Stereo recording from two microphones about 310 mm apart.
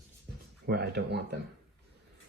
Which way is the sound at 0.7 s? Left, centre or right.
Right.